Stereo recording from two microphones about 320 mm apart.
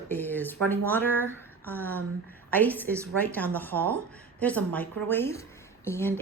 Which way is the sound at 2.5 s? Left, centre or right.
Centre.